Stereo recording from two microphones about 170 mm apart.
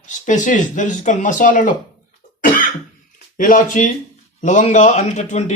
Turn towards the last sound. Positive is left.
turn(degrees=45)  # may be behind; listen again after turning